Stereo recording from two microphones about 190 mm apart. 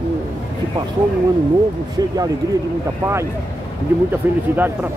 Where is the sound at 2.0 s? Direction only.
20° right (ahead or behind).